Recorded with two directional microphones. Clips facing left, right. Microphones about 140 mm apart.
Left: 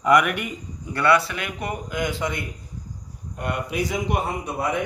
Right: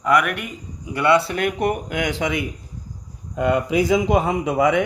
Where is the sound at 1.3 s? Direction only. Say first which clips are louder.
Right 9 dB; 55° right (ahead or behind); by 2.4 s 85° right.